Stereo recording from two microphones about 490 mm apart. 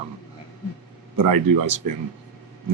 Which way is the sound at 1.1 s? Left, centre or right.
Right.